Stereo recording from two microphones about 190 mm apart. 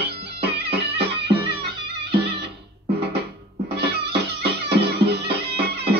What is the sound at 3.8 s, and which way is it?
Music, 60° right (ahead or behind).